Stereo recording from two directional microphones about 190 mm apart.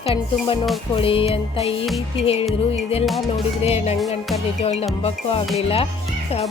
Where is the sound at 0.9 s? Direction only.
30° left (ahead or behind).